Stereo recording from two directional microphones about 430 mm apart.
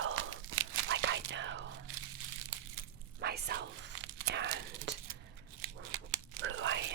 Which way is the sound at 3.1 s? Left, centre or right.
Right.